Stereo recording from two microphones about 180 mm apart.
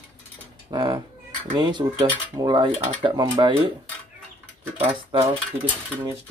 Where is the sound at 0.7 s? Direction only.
25° right (ahead or behind).